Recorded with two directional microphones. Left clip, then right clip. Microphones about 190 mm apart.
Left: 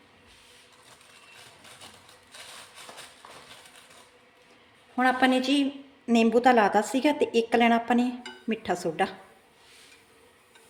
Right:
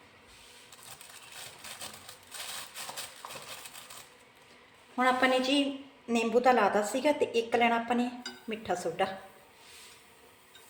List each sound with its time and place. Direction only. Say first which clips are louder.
4.9 s a woman's voice: left 3 dB; 40° left (ahead or behind); by 9.0 s 60° left (ahead or behind)